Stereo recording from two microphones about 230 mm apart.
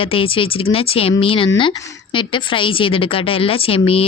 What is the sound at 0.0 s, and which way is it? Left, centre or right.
Speech, left.